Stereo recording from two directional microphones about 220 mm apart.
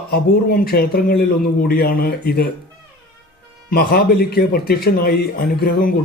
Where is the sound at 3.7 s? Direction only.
45° left (ahead or behind).